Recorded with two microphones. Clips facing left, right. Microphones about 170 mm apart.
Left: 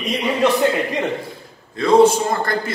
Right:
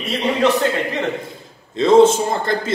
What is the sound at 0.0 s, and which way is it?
Speech, 15° left (ahead or behind).